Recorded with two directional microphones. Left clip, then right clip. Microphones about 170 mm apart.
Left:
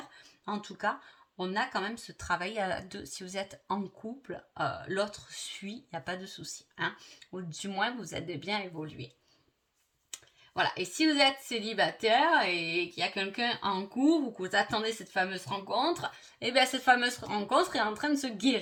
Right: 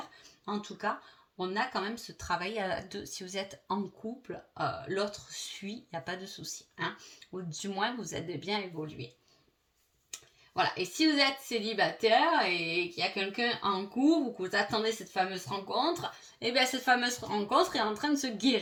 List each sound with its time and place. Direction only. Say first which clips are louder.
0.4 s speech: left 1 dB; 45° left (ahead or behind)
10.6 s speech: even; 45° left (ahead or behind)